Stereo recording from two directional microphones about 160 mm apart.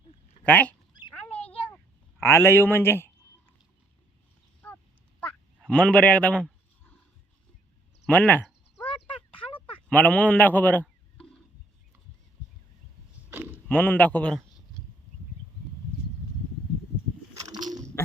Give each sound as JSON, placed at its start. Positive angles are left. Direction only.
{"t": 0.4, "sound": "speech", "side_deg": 10}
{"t": 2.2, "sound": "speech", "side_deg": 15}
{"t": 4.6, "sound": "quack", "side_deg": 15}
{"t": 5.2, "sound": "speech", "side_deg": 10}
{"t": 8.0, "sound": "speech", "side_deg": 10}
{"t": 8.9, "sound": "a sound", "side_deg": 35}
{"t": 9.9, "sound": "a man's voice", "side_deg": 10}
{"t": 13.7, "sound": "speech", "side_deg": 10}
{"t": 17.5, "sound": "a sound", "side_deg": -25}